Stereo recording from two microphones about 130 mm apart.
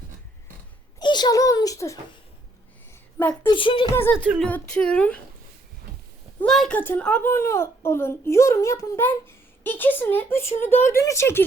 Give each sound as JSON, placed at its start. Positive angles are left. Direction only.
{"t": 0.9, "sound": "a sound", "side_deg": 35}
{"t": 3.2, "sound": "a child's voice", "side_deg": 15}
{"t": 3.5, "sound": "speech", "side_deg": 40}
{"t": 4.4, "sound": "a child's voice", "side_deg": 10}
{"t": 6.4, "sound": "a woman's voice", "side_deg": 5}